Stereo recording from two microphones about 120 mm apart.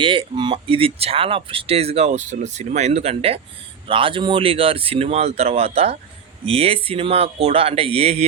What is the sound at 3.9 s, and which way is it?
Speech, 45° right (ahead or behind).